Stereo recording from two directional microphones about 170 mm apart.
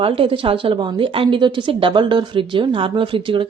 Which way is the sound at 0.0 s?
30° right (ahead or behind).